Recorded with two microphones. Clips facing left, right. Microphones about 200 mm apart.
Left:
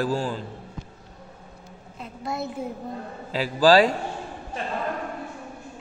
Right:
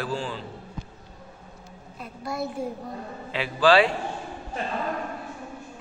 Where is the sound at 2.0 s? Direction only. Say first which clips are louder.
Even; 25° left (ahead or behind).